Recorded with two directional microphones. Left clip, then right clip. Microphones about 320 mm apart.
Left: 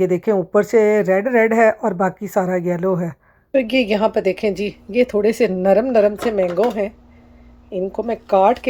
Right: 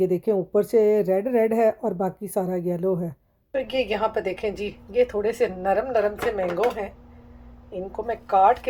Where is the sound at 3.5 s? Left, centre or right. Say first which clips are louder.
Left 8 dB; left.